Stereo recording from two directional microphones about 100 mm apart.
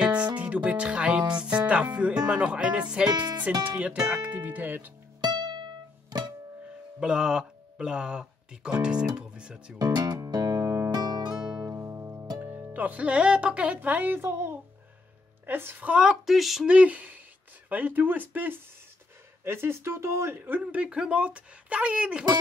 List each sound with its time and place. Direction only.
0.0 s music: 15° right (ahead or behind)
1.4 s speech: 10° right (ahead or behind)
5.2 s music: 45° right (ahead or behind)
7.0 s speech: 5° right (ahead or behind)
9.8 s music: 40° right (ahead or behind)
10.9 s music: 45° right (ahead or behind)
11.6 s music: 25° right (ahead or behind)
12.4 s speech: 20° right (ahead or behind)